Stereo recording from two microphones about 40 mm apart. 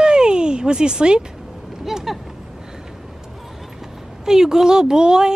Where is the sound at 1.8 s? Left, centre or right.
Centre.